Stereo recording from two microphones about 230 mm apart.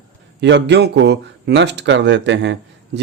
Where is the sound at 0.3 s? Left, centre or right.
Right.